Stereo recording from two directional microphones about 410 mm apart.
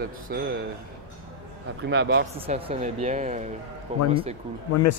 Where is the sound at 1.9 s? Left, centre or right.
Right.